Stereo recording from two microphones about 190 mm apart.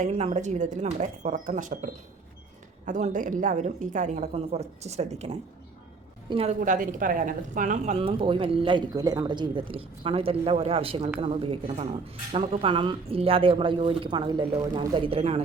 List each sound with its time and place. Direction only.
0.0 s a woman's voice: 35° right (ahead or behind)